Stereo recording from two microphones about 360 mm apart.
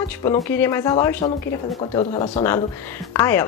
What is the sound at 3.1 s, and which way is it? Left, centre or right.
Speech, centre.